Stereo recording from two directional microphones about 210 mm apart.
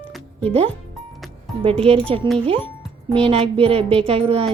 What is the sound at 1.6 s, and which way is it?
Speech, 25° right (ahead or behind).